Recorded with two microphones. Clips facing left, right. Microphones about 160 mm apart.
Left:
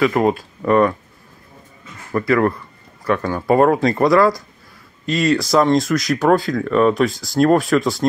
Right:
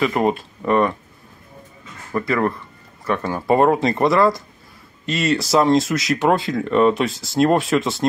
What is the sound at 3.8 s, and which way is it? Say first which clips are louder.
Speech: left 2 dB; 25° right (ahead or behind).